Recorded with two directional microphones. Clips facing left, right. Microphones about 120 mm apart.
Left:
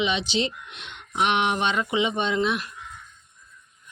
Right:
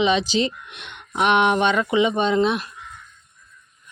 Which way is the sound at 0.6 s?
60° right (ahead or behind).